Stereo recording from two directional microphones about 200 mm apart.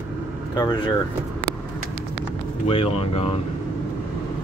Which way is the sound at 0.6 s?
20° left (ahead or behind).